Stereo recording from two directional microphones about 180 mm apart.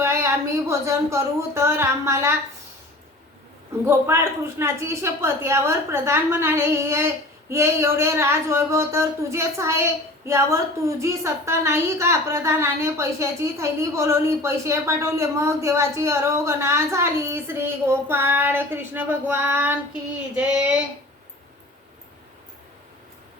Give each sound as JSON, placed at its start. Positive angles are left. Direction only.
{"t": 0.0, "sound": "a sound", "side_deg": -15}
{"t": 0.7, "sound": "speech", "side_deg": -15}
{"t": 3.8, "sound": "speech", "side_deg": -15}